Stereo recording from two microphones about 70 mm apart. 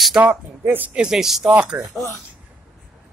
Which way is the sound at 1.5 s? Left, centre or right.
Centre.